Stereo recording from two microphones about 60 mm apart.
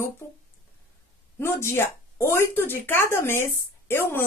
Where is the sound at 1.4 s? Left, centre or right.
Left.